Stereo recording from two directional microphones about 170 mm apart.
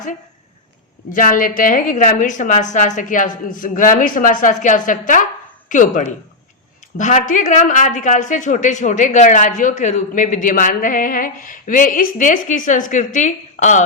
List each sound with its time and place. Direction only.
1.1 s a woman's voice: 55° left (ahead or behind)